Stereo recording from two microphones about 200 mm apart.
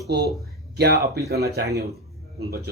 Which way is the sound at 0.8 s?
55° right (ahead or behind).